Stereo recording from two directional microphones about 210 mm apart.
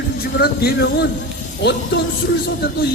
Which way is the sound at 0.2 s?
50° left (ahead or behind).